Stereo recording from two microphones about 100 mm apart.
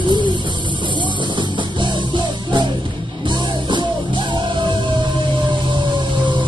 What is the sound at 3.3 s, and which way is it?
Music, 50° right (ahead or behind).